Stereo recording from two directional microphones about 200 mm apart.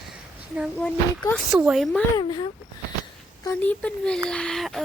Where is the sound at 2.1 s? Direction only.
20° left (ahead or behind).